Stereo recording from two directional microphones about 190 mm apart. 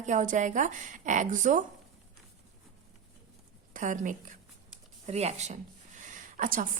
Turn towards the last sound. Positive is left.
turn(degrees=-45)  # may be behind; listen again after turning